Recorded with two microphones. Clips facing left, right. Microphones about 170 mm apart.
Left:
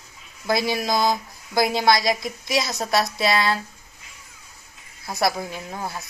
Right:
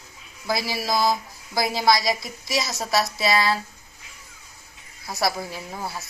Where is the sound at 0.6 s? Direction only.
20° left (ahead or behind).